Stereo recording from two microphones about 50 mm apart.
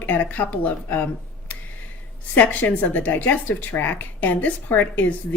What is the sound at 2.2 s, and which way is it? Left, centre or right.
Speech, left.